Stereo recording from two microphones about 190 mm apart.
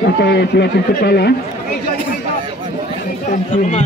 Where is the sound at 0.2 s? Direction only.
60° left (ahead or behind).